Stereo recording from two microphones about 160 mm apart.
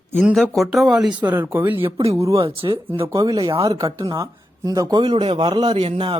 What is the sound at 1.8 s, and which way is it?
Speech, 35° right (ahead or behind).